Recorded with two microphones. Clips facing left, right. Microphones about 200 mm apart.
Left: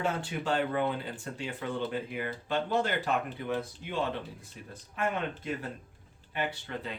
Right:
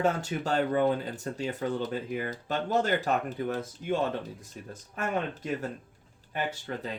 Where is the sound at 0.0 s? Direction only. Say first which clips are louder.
Right 4 dB; 40° right (ahead or behind).